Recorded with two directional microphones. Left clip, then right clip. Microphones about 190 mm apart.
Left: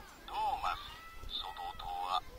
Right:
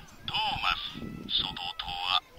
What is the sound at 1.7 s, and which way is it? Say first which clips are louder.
Speech: right 7 dB; 10° right (ahead or behind).